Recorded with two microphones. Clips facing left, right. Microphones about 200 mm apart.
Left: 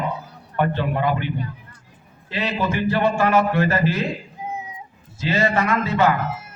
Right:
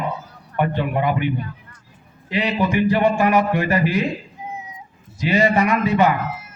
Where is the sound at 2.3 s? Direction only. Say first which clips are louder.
Right 3 dB; 15° right (ahead or behind).